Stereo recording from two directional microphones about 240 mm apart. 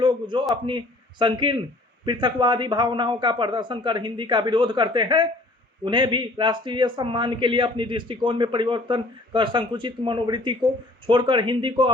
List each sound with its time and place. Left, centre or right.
0.0 s a man's voice: centre